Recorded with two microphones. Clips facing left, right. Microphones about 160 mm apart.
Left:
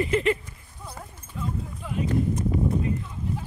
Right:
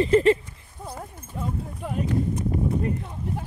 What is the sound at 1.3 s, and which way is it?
Speech, 55° right (ahead or behind).